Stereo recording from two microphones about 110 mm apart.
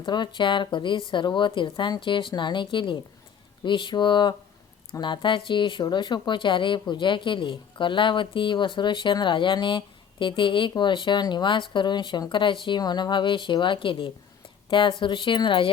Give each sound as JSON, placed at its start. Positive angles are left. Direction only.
{"t": 0.0, "sound": "speech", "side_deg": 45}